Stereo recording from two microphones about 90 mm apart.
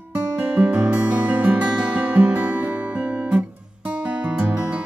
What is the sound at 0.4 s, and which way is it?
Music, 15° right (ahead or behind).